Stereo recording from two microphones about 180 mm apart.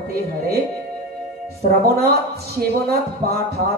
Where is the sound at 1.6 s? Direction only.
60° right (ahead or behind).